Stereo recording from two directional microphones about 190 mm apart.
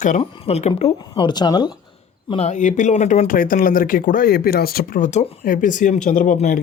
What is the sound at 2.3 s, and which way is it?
Speech, 35° left (ahead or behind).